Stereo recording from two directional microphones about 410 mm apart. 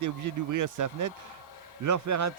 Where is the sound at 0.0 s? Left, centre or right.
Right.